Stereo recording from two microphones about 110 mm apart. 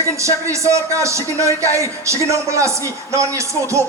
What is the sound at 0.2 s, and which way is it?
A man's voice, 25° right (ahead or behind).